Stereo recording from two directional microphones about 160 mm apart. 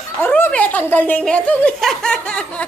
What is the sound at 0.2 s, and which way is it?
Speech, 10° left (ahead or behind).